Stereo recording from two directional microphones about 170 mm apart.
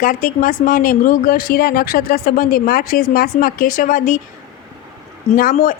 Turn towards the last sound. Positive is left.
turn(degrees=50)  # may be behind; listen again after turning